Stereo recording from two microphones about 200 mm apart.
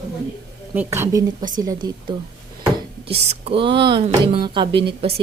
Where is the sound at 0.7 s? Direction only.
10° right (ahead or behind).